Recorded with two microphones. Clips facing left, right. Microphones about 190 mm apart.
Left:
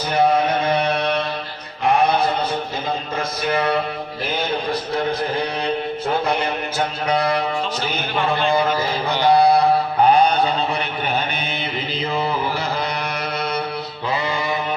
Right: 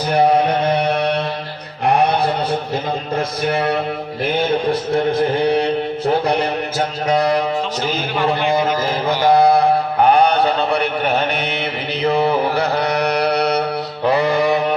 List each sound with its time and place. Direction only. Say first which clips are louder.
5.2 s mantra: right 7 dB; 30° right (ahead or behind)
6.2 s music: right 3 dB; 40° right (ahead or behind)
8.8 s carnatic music: right 3 dB; 45° right (ahead or behind)
10.1 s mantra: right 3 dB; 65° right (ahead or behind)